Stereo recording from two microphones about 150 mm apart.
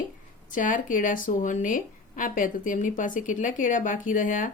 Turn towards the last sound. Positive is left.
turn(degrees=60)  # may be behind; listen again after turning